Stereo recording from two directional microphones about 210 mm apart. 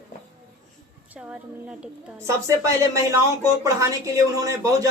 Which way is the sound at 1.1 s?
5° right (ahead or behind).